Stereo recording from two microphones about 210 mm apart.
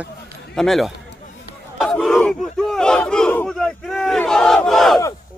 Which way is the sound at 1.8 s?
Centre (ahead or behind).